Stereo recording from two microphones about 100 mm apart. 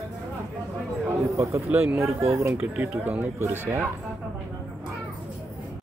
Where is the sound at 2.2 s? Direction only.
30° right (ahead or behind).